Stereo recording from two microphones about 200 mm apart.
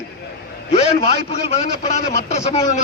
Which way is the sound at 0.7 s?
30° left (ahead or behind).